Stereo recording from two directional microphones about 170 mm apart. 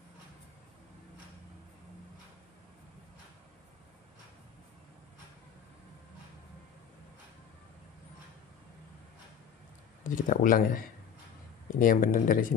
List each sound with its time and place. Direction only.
10.0 s speech: 50° left (ahead or behind)